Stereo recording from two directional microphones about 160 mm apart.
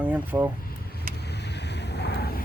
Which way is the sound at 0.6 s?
80° left.